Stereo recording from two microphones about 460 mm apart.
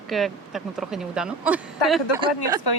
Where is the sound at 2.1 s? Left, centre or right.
Left.